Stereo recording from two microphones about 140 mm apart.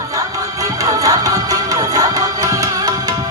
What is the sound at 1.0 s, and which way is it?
Music, 25° right (ahead or behind).